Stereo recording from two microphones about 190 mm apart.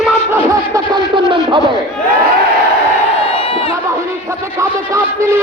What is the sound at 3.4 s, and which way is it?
Crowd, 30° left (ahead or behind).